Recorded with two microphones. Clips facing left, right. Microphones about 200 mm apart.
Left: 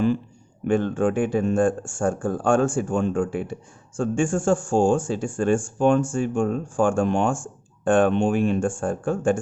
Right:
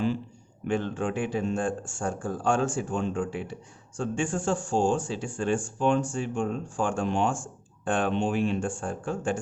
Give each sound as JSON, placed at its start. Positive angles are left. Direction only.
{"t": 0.7, "sound": "speech", "side_deg": 50}